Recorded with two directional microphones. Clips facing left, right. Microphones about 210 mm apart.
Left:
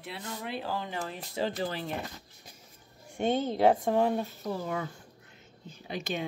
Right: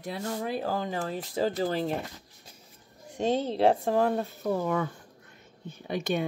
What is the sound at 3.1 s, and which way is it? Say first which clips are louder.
Speech: right 1 dB; 30° right (ahead or behind).